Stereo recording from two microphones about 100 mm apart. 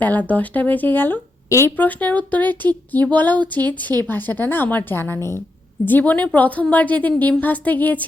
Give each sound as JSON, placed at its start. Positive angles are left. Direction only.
{"t": 0.0, "sound": "speech", "side_deg": 15}